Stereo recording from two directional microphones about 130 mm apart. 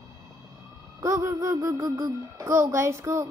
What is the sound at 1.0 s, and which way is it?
Speech, 25° right (ahead or behind).